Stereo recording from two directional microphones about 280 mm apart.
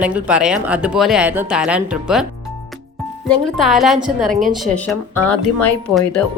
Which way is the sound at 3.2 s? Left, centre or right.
Centre.